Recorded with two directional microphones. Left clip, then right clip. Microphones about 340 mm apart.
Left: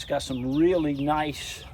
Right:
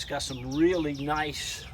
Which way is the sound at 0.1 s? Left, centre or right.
Centre.